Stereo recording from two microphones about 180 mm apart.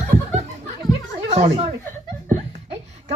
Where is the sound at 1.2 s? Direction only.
35° right (ahead or behind).